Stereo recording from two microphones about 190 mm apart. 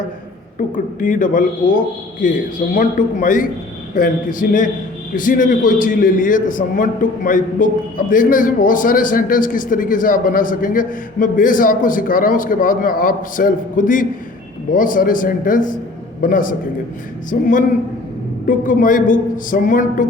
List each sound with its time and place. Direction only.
0.9 s a man's voice: 45° left (ahead or behind)